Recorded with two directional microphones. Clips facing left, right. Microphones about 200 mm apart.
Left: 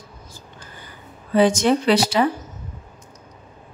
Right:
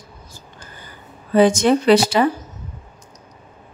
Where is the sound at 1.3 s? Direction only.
50° right (ahead or behind).